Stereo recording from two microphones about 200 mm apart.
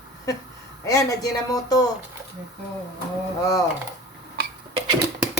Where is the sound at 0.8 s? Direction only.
15° left (ahead or behind).